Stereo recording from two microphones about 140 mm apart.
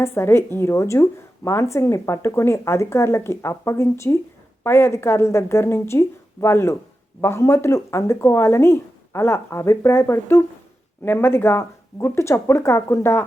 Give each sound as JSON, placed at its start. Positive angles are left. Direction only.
{"t": 0.0, "sound": "speech", "side_deg": 20}